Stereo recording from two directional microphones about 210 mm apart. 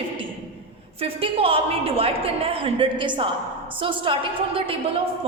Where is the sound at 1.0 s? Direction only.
25° right (ahead or behind).